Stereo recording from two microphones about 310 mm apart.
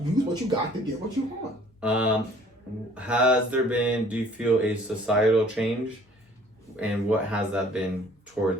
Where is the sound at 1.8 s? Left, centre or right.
Centre.